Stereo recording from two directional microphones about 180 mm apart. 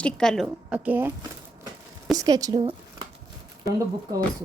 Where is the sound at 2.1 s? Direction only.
20° right (ahead or behind).